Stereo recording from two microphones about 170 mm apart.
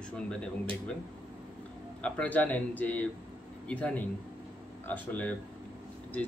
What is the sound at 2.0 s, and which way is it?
Speech, 10° left (ahead or behind).